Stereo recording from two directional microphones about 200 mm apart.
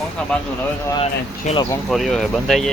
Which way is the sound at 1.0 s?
35° left (ahead or behind).